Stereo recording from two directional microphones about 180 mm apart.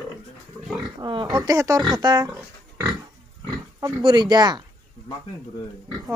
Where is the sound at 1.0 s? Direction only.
25° right (ahead or behind).